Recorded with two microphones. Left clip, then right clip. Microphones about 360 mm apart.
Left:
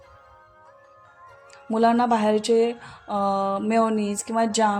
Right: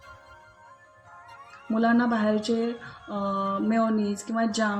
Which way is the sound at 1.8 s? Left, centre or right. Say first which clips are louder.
Left 5 dB; left.